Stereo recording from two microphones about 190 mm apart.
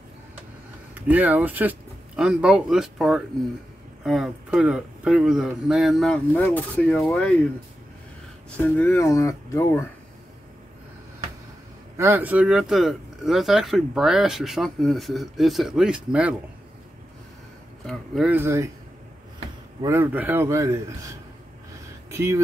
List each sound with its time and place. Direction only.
1.0 s speech: 10° right (ahead or behind)
8.5 s speech: 10° left (ahead or behind)
12.0 s speech: 10° right (ahead or behind)
17.8 s a man's voice: 5° right (ahead or behind)
19.8 s a man's voice: 15° right (ahead or behind)